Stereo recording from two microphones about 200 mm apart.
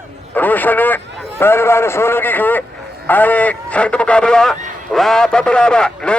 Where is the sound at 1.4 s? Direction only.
10° left (ahead or behind).